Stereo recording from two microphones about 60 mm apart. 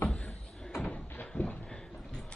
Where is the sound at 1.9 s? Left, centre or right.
Centre.